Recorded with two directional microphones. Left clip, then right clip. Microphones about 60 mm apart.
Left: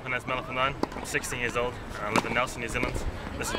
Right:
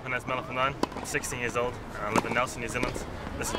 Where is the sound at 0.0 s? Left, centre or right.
Centre.